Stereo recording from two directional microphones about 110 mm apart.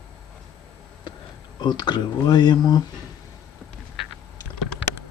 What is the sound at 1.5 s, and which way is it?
Speech, 40° left (ahead or behind).